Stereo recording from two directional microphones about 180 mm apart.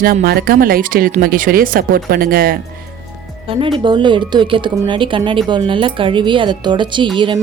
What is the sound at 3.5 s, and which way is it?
Speech, 30° right (ahead or behind).